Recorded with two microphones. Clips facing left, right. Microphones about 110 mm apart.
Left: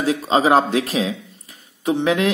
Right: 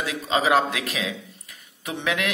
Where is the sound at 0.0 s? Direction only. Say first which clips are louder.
Left 6 dB; 35° left (ahead or behind).